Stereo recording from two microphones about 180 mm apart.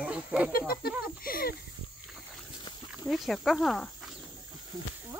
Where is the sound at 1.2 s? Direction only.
55° left (ahead or behind).